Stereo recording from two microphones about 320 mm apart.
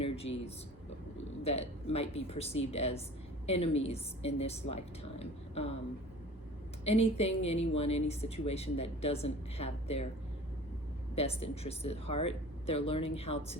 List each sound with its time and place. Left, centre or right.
0.0 s a woman's voice: centre
6.8 s speech: centre
11.1 s speech: centre